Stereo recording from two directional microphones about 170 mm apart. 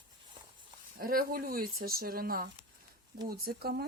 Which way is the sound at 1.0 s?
60° right (ahead or behind).